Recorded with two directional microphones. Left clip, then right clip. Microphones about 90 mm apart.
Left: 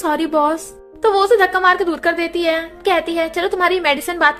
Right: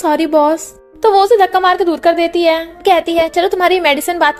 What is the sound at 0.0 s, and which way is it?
A child's voice, 40° right (ahead or behind).